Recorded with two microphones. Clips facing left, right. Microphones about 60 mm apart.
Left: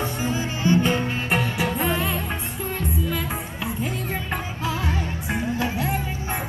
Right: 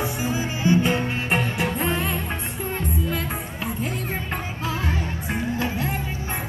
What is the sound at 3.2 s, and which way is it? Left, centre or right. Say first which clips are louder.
Music: even; centre.